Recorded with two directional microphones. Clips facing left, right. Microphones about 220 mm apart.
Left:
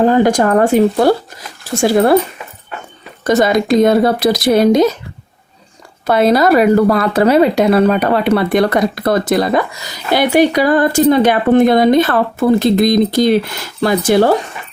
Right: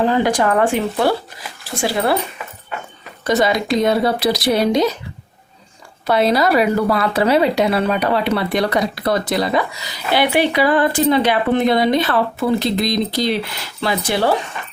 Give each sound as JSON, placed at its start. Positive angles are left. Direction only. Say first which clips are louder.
{"t": 0.0, "sound": "speech", "louder": "left 5 dB", "side_deg": 45}
{"t": 3.2, "sound": "speech", "louder": "left 5 dB", "side_deg": 45}
{"t": 6.1, "sound": "speech", "louder": "left 5 dB", "side_deg": 50}